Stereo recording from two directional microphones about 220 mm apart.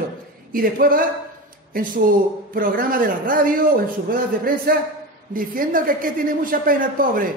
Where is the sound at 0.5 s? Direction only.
40° right (ahead or behind).